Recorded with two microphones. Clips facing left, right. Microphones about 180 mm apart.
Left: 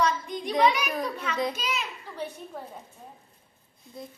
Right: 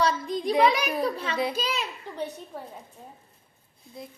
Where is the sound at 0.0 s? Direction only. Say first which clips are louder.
Right 2 dB; 35° right (ahead or behind).